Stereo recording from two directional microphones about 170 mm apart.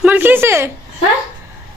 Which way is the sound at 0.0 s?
10° right (ahead or behind).